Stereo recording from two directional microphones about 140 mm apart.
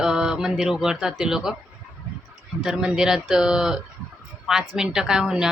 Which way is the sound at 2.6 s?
5° right (ahead or behind).